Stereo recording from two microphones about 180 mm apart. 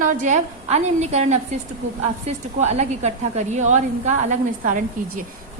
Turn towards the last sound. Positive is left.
turn(degrees=-45)  # may be behind; listen again after turning